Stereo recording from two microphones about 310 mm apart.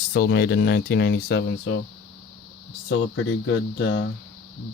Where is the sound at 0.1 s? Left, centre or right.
Left.